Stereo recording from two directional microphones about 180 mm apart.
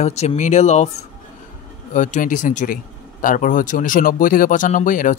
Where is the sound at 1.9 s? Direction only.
45° left (ahead or behind).